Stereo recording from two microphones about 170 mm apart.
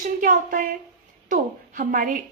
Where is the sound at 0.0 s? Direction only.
55° right (ahead or behind).